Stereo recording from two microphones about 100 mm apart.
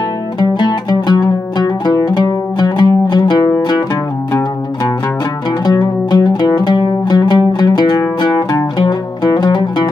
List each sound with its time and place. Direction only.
0.4 s music: 45° left (ahead or behind)
5.7 s music: 45° left (ahead or behind)